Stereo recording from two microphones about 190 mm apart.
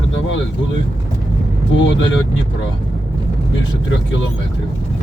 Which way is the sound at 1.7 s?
75° left (ahead or behind).